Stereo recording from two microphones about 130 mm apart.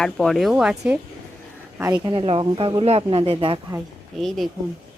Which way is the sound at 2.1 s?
40° right (ahead or behind).